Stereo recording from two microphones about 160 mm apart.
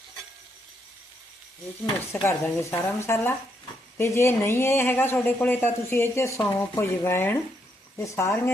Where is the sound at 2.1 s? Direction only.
15° left (ahead or behind).